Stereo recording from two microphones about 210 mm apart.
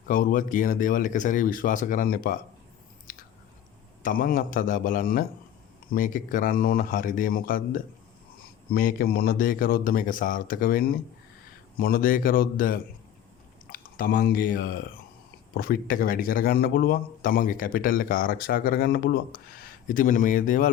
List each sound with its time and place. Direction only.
0.1 s speech: 40° left (ahead or behind)
3.1 s chewing: 40° left (ahead or behind)
4.0 s speech: 40° left (ahead or behind)